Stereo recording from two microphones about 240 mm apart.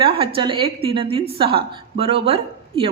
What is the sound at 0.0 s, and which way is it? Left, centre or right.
A woman's voice, right.